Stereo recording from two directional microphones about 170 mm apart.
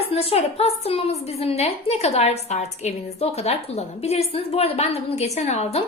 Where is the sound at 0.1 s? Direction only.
35° left (ahead or behind).